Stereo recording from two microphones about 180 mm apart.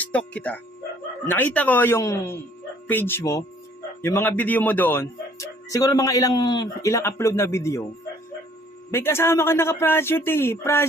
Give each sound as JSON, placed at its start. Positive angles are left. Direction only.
{"t": 0.0, "sound": "speech", "side_deg": 5}
{"t": 8.9, "sound": "speech", "side_deg": 15}